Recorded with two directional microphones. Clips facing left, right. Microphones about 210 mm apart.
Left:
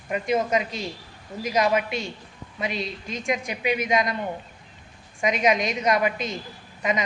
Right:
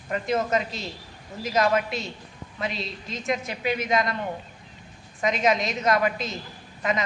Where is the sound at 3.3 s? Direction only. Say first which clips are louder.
Left 1 dB; 15° left (ahead or behind).